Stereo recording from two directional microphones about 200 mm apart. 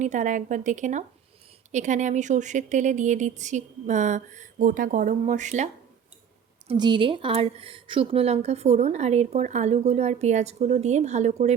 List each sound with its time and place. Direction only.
0.0 s a woman's voice: 40° right (ahead or behind)
6.7 s a woman's voice: 25° right (ahead or behind)